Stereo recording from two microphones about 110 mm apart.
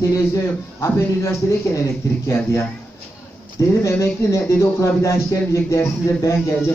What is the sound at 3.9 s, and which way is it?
Speech, 25° left (ahead or behind).